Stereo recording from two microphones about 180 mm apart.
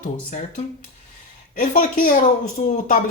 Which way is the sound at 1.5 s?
50° left (ahead or behind).